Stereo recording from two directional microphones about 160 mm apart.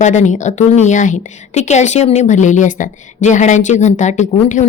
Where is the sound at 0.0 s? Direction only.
50° left (ahead or behind).